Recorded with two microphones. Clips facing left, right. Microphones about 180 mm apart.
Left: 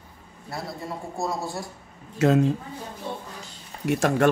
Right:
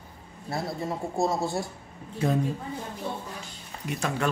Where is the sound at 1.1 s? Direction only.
25° right (ahead or behind).